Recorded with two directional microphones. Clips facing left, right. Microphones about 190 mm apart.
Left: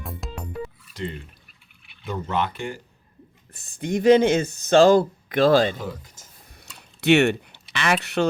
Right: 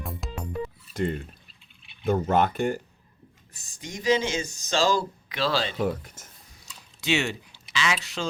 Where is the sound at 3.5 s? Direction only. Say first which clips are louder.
Left 13 dB; 60° left (ahead or behind).